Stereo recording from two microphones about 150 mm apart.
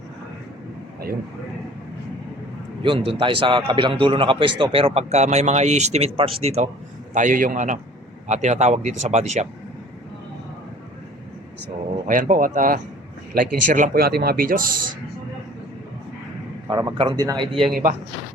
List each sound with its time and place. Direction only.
2.8 s a man's voice: 35° right (ahead or behind)
7.1 s speech: 55° right (ahead or behind)
12.0 s speech: 60° right (ahead or behind)
16.6 s a man's voice: 25° right (ahead or behind)